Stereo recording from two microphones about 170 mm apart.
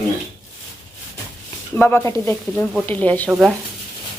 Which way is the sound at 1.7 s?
10° left (ahead or behind).